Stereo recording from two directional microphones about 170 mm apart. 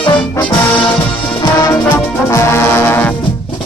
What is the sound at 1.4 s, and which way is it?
Music, 20° left (ahead or behind).